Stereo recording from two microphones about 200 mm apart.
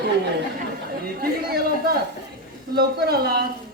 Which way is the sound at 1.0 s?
50° right (ahead or behind).